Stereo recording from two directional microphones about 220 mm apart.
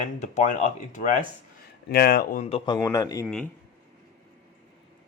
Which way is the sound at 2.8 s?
15° left (ahead or behind).